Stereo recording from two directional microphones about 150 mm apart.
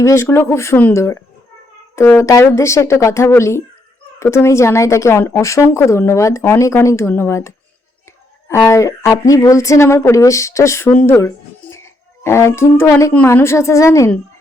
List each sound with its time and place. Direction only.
0.0 s a woman's voice: 20° left (ahead or behind)